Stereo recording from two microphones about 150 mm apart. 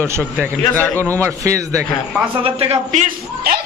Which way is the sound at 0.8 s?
10° left (ahead or behind).